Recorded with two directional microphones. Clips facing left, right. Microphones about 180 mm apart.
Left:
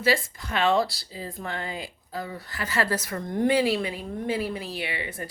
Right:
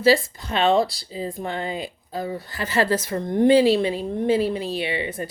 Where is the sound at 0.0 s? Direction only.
30° right (ahead or behind).